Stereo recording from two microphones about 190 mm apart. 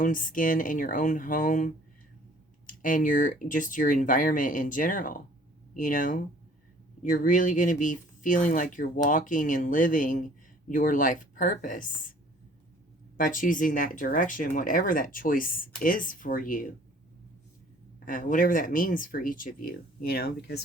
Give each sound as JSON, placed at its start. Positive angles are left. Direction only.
{"t": 0.0, "sound": "speech", "side_deg": 45}
{"t": 13.1, "sound": "speech", "side_deg": 45}
{"t": 18.0, "sound": "speech", "side_deg": 45}